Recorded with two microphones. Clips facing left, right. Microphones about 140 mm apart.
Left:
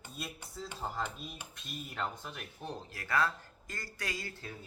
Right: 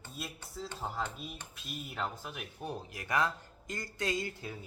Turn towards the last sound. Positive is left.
turn(degrees=-20)  # may be behind; listen again after turning